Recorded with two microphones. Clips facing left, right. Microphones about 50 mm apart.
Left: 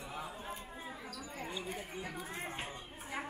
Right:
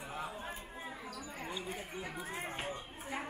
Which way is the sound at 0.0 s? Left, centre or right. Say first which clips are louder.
Right 2 dB; right.